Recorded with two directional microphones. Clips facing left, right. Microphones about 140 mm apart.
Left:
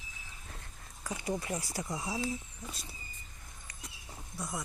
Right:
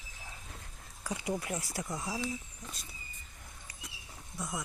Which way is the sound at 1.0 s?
10° right (ahead or behind).